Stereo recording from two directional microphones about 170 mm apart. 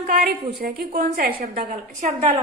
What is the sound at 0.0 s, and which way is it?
A woman's voice, 55° right (ahead or behind).